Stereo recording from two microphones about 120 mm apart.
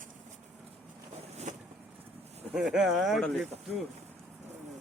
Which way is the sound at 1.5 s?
90° right.